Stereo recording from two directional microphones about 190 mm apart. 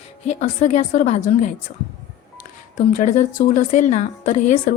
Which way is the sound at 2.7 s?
40° left (ahead or behind).